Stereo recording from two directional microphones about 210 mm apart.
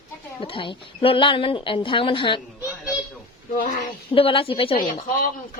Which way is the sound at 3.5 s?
40° left (ahead or behind).